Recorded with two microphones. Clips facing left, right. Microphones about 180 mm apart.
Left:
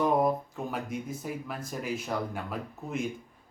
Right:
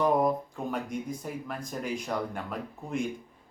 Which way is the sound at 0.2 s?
5° left (ahead or behind).